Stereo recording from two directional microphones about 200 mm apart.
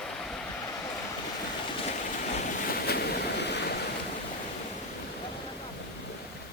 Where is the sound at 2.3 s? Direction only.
40° left (ahead or behind); by 3.7 s 55° left (ahead or behind).